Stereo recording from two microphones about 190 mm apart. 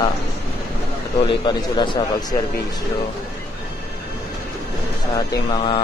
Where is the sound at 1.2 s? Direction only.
25° left (ahead or behind).